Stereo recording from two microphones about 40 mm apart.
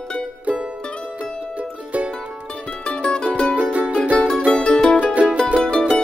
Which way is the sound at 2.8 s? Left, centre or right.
Left.